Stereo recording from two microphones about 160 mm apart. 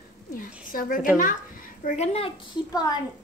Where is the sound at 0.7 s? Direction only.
60° left (ahead or behind).